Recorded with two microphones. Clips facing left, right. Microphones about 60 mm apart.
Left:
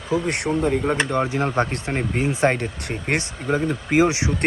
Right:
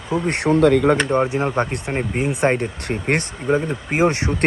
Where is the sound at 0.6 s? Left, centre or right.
Right.